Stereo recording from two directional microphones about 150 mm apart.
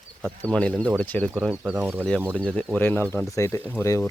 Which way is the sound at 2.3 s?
5° left (ahead or behind).